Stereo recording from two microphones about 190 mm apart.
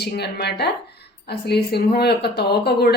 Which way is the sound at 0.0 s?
60° left (ahead or behind).